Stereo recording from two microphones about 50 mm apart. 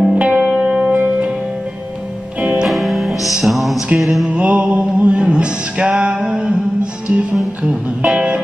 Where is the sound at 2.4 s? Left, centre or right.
Right.